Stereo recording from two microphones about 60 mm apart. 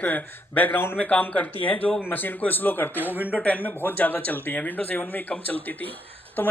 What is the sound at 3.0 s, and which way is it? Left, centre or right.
Speech, right.